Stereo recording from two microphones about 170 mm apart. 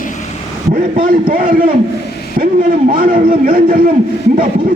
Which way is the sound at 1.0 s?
55° right (ahead or behind).